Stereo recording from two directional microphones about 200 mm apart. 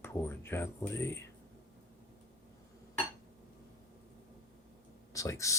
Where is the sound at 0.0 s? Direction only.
10° left (ahead or behind).